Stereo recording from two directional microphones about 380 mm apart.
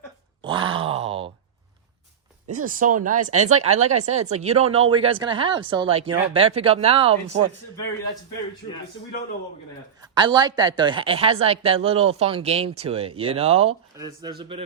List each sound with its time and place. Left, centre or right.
0.4 s a sound: centre
2.6 s speech: right
10.2 s speech: centre